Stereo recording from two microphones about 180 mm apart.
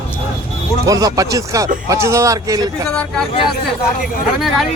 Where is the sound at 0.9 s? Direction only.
20° right (ahead or behind).